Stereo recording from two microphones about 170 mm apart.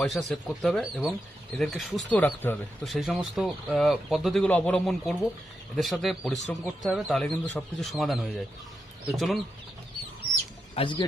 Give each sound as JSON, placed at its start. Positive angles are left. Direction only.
{"t": 0.0, "sound": "speech", "side_deg": 0}
{"t": 2.8, "sound": "speech", "side_deg": 0}
{"t": 10.8, "sound": "speech", "side_deg": 30}